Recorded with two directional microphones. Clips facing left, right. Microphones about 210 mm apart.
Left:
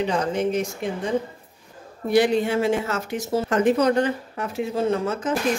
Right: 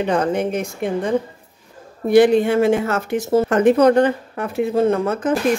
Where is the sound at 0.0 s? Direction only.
55° right (ahead or behind).